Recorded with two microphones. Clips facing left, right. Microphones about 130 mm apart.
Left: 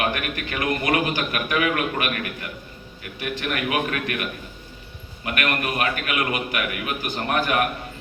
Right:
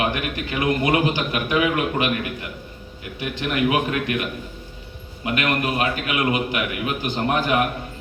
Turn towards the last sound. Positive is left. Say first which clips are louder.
# right 2 dB
turn(degrees=-20)  # may be behind; listen again after turning